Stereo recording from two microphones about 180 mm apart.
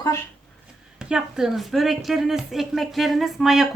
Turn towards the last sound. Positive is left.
turn(degrees=0)  # may be behind; listen again after turning